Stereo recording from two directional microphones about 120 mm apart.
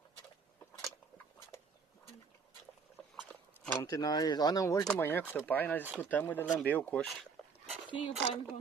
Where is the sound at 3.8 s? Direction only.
30° left (ahead or behind).